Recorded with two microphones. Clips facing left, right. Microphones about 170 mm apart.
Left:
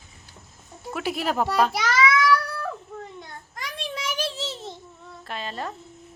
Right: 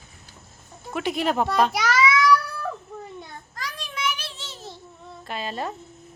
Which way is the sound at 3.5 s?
25° left (ahead or behind).